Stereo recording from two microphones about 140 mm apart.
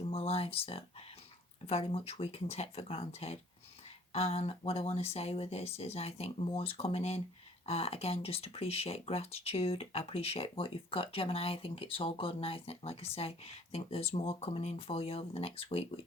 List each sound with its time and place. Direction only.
0.1 s speech: 45° left (ahead or behind)